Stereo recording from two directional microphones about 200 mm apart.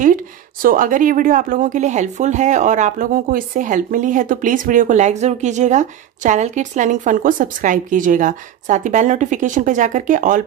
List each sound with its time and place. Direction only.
0.0 s a woman's voice: 45° right (ahead or behind)